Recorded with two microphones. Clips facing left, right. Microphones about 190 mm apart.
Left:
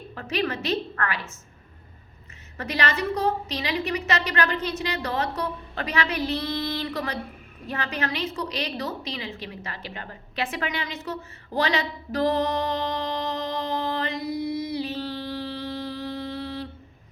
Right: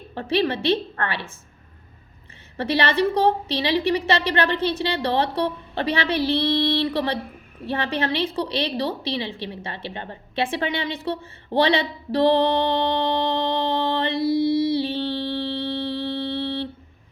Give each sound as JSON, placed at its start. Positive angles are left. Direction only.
{"t": 0.1, "sound": "a woman's voice", "side_deg": -30}
{"t": 2.6, "sound": "a woman's voice", "side_deg": -30}
{"t": 7.7, "sound": "a sound", "side_deg": -30}